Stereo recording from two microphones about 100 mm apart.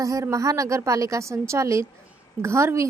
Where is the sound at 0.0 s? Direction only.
35° right (ahead or behind).